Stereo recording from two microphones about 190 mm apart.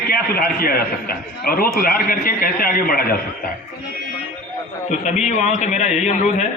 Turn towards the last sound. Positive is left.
turn(degrees=40)  # may be behind; listen again after turning